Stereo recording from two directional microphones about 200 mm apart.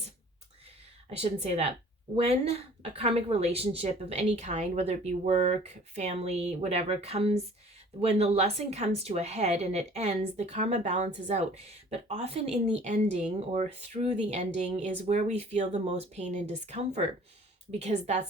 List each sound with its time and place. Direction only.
1.1 s a woman's voice: 30° right (ahead or behind)